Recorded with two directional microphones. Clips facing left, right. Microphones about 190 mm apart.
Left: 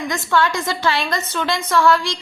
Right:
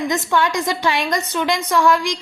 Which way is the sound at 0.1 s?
15° right (ahead or behind).